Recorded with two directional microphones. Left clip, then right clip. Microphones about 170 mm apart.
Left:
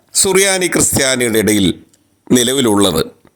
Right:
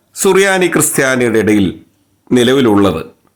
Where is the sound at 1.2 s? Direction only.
30° left (ahead or behind).